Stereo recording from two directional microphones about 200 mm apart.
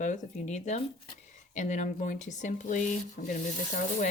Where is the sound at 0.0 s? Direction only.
40° left (ahead or behind).